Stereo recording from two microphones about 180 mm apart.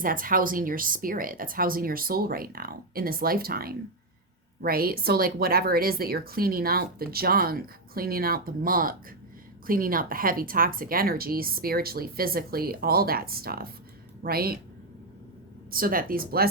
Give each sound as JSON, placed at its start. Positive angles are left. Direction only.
{"t": 0.0, "sound": "a woman's voice", "side_deg": -50}
{"t": 15.7, "sound": "a woman's voice", "side_deg": -55}